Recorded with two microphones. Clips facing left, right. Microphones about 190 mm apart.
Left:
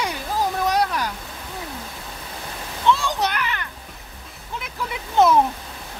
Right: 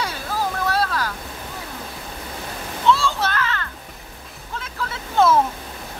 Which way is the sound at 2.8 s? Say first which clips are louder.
Right 1 dB; 15° left (ahead or behind).